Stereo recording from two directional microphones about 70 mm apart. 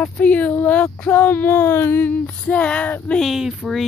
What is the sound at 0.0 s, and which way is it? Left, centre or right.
Speech, left.